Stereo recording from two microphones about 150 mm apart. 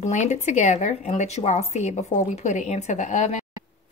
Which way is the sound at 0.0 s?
50° left (ahead or behind).